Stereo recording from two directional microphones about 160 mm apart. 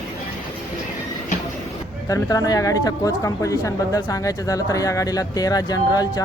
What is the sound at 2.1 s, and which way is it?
Speech, 20° left (ahead or behind).